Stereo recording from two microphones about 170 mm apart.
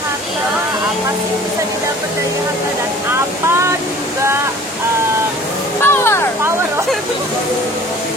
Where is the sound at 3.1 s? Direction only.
15° right (ahead or behind).